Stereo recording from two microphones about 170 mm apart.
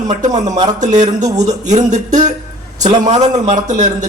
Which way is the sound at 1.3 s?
40° right (ahead or behind).